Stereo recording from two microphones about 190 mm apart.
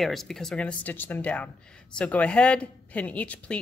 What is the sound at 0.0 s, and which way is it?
A woman's voice, centre (ahead or behind).